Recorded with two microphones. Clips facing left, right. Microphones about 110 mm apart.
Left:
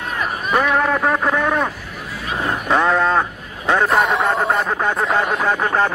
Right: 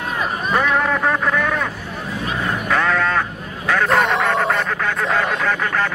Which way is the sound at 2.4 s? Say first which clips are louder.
Left 3 dB; 20° left (ahead or behind).